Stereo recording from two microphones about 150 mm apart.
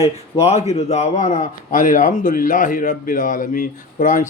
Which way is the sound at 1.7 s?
60° left (ahead or behind).